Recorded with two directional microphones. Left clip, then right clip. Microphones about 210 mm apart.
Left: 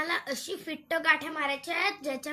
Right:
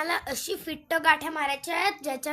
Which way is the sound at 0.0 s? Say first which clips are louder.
Right 2 dB; 55° right (ahead or behind).